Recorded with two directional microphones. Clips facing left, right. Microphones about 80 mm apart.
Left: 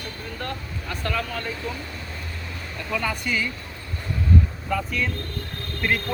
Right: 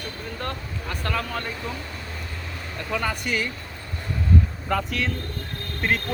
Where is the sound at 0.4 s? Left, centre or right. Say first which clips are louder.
Even; right.